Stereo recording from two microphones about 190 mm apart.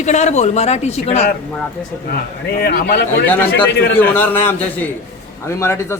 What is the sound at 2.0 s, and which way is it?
A man's voice, 55° left (ahead or behind).